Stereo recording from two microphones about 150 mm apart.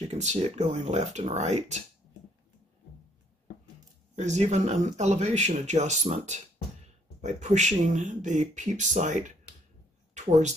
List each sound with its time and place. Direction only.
0.1 s speech: 45° right (ahead or behind)
4.1 s speech: 50° right (ahead or behind)